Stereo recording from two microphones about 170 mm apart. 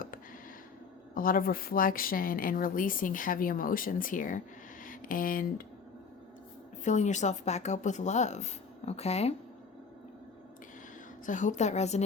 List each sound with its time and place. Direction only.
1.1 s speech: 55° left (ahead or behind)
6.8 s speech: 45° left (ahead or behind)
11.3 s speech: 45° left (ahead or behind)